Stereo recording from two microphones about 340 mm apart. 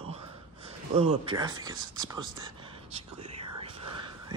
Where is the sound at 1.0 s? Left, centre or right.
Centre.